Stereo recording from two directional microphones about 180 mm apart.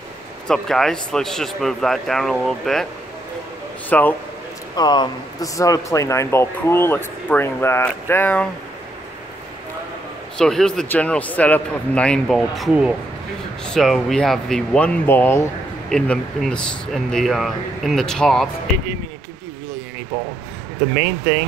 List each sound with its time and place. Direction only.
0.5 s speech: 5° left (ahead or behind)
3.9 s speech: 5° left (ahead or behind)
4.7 s speech: 25° left (ahead or behind); by 8.5 s 10° left (ahead or behind)
10.3 s speech: 5° left (ahead or behind)